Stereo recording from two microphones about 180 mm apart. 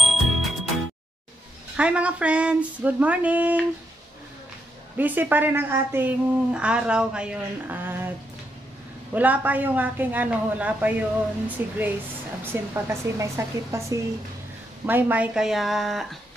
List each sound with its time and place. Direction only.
0.0 s music: centre (ahead or behind)
1.8 s a woman's voice: 5° right (ahead or behind)
4.9 s a woman's voice: 10° right (ahead or behind)
9.1 s a woman's voice: 10° right (ahead or behind)